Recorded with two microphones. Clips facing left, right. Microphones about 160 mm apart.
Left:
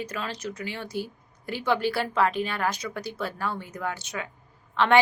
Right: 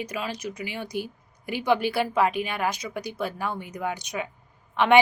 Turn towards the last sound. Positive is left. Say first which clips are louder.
# right 2 dB
turn(degrees=-15)  # may be behind; listen again after turning